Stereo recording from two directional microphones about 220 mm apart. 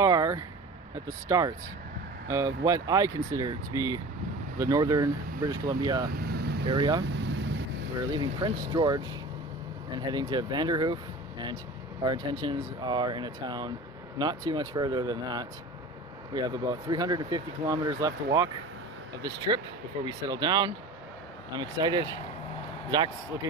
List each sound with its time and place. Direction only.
0.0 s vehicle: 15° right (ahead or behind)
1.0 s speech: 15° right (ahead or behind)
6.1 s vehicle: 45° right (ahead or behind)
6.7 s speech: 20° right (ahead or behind)
7.1 s vehicle: 55° right (ahead or behind)
8.1 s speech: 20° right (ahead or behind)